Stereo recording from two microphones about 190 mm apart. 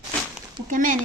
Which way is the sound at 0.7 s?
45° right (ahead or behind).